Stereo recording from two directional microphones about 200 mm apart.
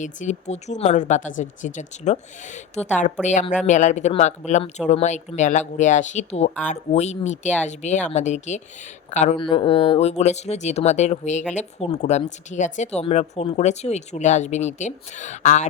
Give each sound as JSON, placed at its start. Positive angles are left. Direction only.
{"t": 0.0, "sound": "speech", "side_deg": 35}